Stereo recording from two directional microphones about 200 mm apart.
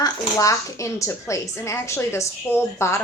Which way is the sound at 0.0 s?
15° left (ahead or behind).